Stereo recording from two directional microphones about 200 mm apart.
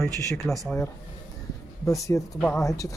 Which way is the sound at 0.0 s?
Centre (ahead or behind).